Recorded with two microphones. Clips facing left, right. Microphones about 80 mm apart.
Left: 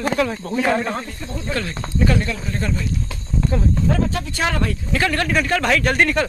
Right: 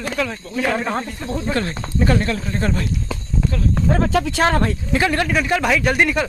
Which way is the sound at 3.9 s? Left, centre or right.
Right.